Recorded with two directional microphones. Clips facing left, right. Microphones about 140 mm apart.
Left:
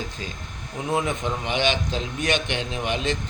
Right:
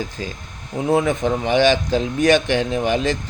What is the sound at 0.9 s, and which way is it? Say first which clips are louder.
Speech: right 7 dB; 35° right (ahead or behind).